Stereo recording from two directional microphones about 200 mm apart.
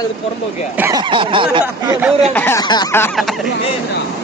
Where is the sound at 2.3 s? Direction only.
10° left (ahead or behind).